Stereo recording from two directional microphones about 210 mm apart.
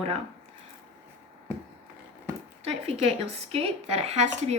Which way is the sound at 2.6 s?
30° right (ahead or behind).